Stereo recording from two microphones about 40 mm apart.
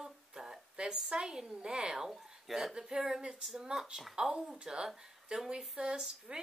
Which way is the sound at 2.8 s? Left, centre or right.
Centre.